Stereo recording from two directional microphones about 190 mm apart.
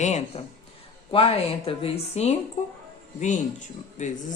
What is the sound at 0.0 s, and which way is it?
Speech, 40° left (ahead or behind).